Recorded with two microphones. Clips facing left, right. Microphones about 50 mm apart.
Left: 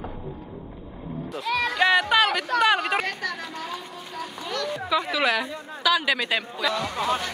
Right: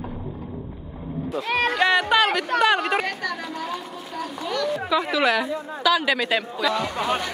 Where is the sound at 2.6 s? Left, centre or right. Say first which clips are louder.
Right 1 dB; centre.